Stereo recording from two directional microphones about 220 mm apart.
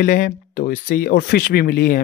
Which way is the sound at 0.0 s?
40° left (ahead or behind).